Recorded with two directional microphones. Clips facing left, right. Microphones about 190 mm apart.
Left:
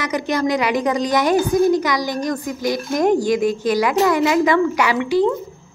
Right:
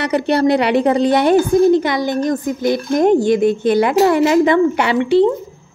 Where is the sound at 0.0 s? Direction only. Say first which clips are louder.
Right 5 dB; 35° right (ahead or behind).